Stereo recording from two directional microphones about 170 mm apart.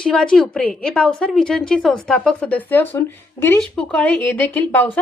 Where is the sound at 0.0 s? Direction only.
5° left (ahead or behind).